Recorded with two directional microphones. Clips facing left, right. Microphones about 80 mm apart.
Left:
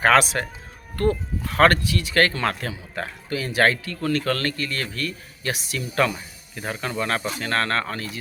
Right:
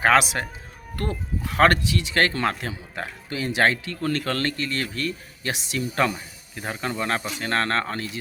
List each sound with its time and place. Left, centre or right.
0.0 s speech: centre
1.5 s speech: centre